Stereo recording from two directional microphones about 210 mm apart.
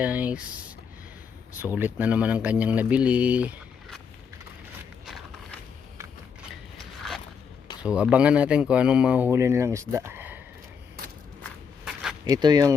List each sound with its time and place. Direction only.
0.0 s speech: 5° right (ahead or behind)
1.5 s speech: 10° right (ahead or behind)
5.0 s a sound: centre (ahead or behind)
7.8 s speech: 5° right (ahead or behind)
12.2 s speech: 20° right (ahead or behind)